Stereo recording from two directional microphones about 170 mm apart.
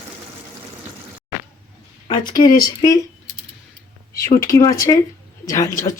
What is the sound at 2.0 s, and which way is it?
Speech, 25° left (ahead or behind).